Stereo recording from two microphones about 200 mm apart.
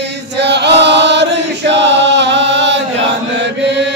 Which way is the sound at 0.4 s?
60° right (ahead or behind).